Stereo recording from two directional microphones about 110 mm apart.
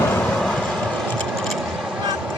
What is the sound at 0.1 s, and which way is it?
Vehicle, 10° left (ahead or behind).